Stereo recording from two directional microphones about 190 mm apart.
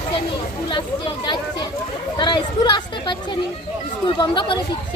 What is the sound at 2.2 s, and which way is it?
Speech, 25° left (ahead or behind).